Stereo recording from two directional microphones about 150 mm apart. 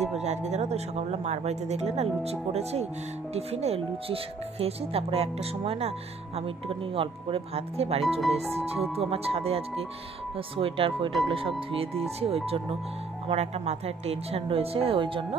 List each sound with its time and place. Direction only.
0.0 s speech: 45° right (ahead or behind)
8.2 s speech: centre (ahead or behind)
9.1 s speech: 40° right (ahead or behind)